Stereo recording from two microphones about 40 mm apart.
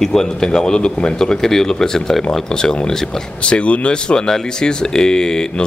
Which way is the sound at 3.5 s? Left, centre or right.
Left.